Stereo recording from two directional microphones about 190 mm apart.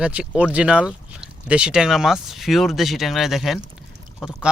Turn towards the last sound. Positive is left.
turn(degrees=-5)  # may be behind; listen again after turning